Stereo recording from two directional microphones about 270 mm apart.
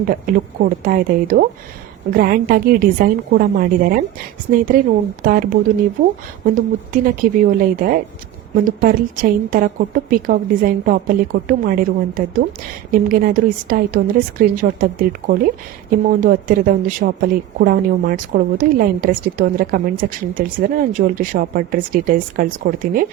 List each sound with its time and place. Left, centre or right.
0.0 s a woman's voice: right
16.0 s a woman's voice: right